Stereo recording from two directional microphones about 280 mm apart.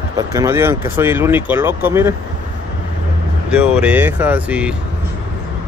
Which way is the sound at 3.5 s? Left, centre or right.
Centre.